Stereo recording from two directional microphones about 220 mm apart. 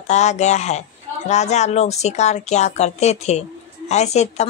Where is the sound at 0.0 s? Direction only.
30° left (ahead or behind).